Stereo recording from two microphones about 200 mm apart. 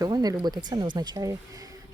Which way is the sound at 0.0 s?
20° right (ahead or behind).